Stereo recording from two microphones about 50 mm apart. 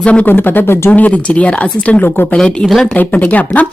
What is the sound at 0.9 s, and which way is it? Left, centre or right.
Speech, left.